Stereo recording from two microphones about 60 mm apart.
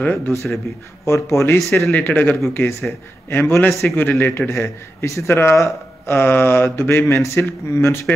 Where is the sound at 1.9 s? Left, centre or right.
Left.